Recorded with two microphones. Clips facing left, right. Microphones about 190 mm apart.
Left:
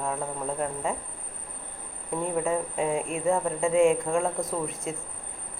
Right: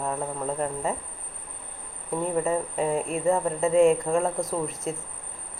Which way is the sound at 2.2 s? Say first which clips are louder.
Right 1 dB; centre (ahead or behind).